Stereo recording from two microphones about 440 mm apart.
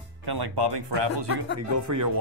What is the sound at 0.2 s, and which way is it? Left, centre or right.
Speech, right.